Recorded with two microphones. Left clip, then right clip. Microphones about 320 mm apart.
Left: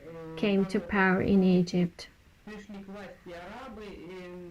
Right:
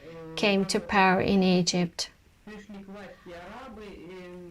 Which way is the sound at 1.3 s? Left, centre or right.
Right.